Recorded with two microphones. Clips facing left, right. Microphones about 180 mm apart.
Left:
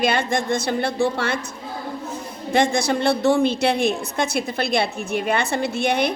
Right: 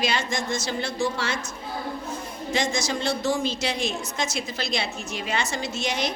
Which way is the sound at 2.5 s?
60° left (ahead or behind).